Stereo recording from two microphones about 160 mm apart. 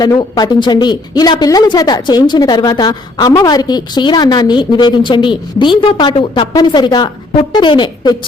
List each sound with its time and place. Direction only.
0.0 s speech: 25° left (ahead or behind)